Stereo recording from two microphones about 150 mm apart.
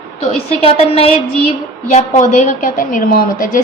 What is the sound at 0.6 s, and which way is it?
Speech, 40° left (ahead or behind).